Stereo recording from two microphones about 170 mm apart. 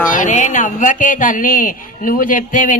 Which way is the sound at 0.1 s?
50° left (ahead or behind).